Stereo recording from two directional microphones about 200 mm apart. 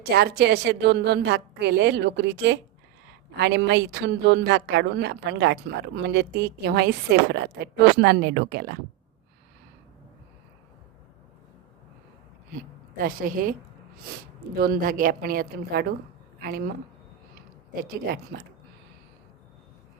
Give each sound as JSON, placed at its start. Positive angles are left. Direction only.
{"t": 0.0, "sound": "a woman's voice", "side_deg": -50}
{"t": 13.0, "sound": "speech", "side_deg": -45}
{"t": 14.6, "sound": "speech", "side_deg": -45}
{"t": 17.8, "sound": "speech", "side_deg": -50}